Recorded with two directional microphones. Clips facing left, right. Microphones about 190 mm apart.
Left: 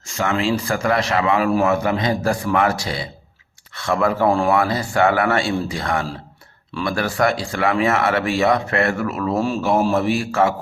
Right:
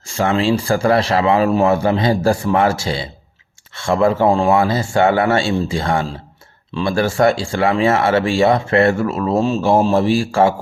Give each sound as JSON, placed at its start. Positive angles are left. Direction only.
{"t": 0.1, "sound": "speech", "side_deg": -30}